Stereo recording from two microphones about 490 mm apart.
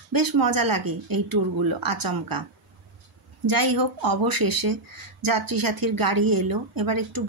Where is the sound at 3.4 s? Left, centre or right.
Right.